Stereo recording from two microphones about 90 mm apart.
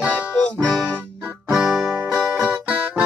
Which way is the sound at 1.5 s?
5° right (ahead or behind).